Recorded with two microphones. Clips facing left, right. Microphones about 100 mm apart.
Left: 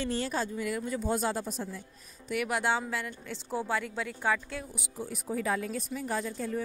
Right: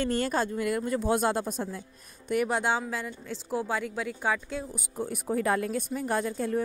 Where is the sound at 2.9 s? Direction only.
20° right (ahead or behind).